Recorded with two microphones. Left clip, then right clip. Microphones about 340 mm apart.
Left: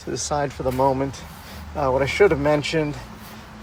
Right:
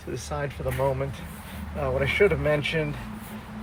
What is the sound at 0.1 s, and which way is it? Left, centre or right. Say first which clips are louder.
Speech: left 8 dB; centre.